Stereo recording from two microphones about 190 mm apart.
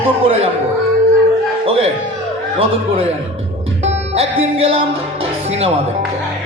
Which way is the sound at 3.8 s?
35° right (ahead or behind).